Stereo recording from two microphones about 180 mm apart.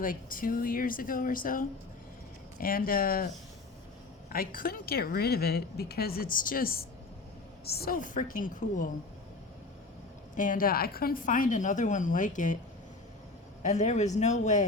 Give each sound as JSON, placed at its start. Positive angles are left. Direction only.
{"t": 0.0, "sound": "a woman's voice", "side_deg": 50}
{"t": 4.3, "sound": "a woman's voice", "side_deg": 55}
{"t": 10.3, "sound": "a woman's voice", "side_deg": 45}
{"t": 13.6, "sound": "a woman's voice", "side_deg": 40}